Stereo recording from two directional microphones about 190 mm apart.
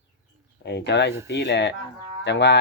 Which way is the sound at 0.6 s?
65° left (ahead or behind).